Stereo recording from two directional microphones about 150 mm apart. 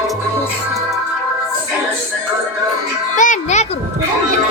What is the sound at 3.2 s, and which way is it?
Music, 55° left (ahead or behind).